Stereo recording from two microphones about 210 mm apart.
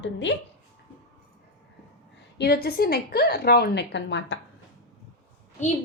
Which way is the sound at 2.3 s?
50° left (ahead or behind).